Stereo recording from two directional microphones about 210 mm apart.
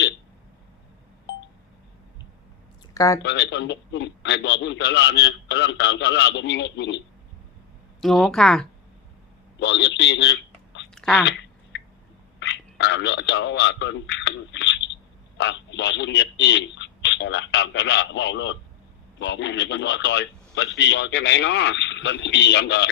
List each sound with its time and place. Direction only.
2.9 s speech: 15° left (ahead or behind)
3.2 s a man's voice: 55° left (ahead or behind)
8.0 s speech: centre (ahead or behind)
9.6 s a man's voice: 55° left (ahead or behind)
10.9 s a sound: centre (ahead or behind)
12.4 s a man's voice: 55° left (ahead or behind)